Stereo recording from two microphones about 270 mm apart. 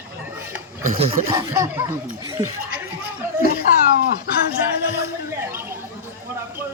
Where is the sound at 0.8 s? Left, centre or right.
Right.